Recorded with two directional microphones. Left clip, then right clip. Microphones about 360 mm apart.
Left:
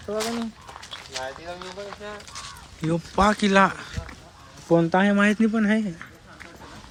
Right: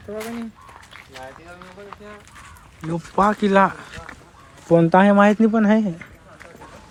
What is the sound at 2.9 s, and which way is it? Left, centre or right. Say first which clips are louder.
Speech: right 2 dB; centre.